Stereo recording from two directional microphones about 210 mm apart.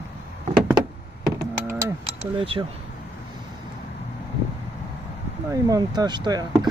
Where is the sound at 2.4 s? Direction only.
25° right (ahead or behind).